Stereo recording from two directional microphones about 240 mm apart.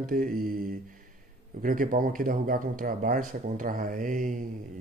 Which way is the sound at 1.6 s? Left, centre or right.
Right.